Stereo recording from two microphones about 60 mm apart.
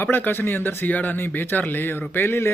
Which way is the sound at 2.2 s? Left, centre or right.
Left.